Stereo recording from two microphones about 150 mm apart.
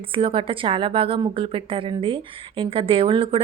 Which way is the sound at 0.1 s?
35° right (ahead or behind).